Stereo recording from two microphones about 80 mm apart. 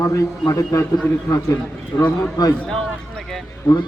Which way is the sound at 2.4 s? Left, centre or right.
Left.